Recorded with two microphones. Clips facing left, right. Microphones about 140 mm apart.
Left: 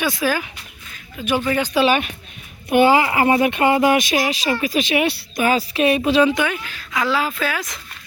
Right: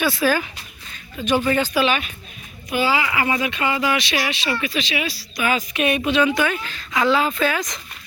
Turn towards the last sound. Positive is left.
turn(degrees=5)  # may be behind; listen again after turning